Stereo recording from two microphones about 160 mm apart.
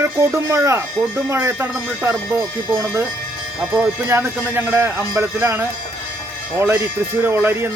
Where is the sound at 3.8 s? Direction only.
15° right (ahead or behind).